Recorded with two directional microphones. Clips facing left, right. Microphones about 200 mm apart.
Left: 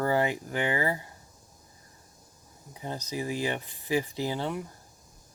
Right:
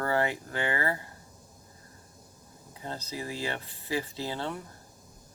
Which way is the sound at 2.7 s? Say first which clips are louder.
Left 3 dB; 15° left (ahead or behind).